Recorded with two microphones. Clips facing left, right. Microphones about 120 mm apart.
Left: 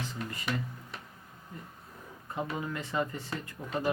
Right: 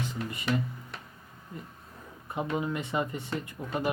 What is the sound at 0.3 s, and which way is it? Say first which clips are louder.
Speech: right 6 dB; 20° right (ahead or behind).